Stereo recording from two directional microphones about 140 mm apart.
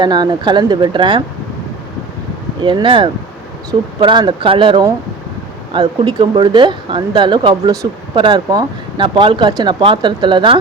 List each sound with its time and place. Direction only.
0.0 s speech: 30° right (ahead or behind)
2.6 s speech: 35° right (ahead or behind)